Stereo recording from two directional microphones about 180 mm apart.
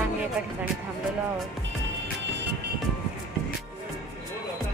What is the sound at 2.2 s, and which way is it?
Music, 75° right (ahead or behind).